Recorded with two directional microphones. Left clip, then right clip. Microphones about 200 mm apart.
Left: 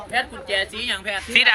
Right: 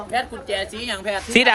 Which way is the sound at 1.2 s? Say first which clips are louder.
Even; 35° right (ahead or behind).